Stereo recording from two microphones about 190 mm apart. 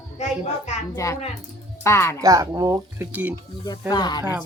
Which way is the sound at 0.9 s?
15° left (ahead or behind).